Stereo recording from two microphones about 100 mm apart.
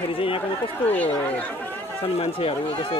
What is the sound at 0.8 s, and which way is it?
Speech, 15° left (ahead or behind).